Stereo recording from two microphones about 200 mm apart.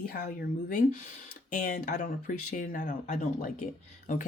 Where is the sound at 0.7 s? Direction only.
40° left (ahead or behind).